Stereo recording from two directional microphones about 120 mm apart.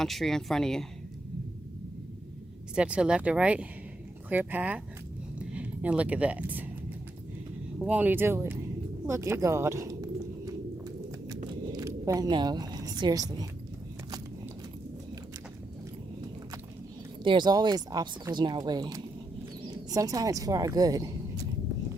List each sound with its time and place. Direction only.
0.0 s speech: centre (ahead or behind)
2.7 s speech: 10° right (ahead or behind)
7.8 s speech: 10° right (ahead or behind)
9.0 s a sound: 25° right (ahead or behind)
11.7 s a woman's voice: 30° right (ahead or behind)
17.2 s speech: 40° right (ahead or behind)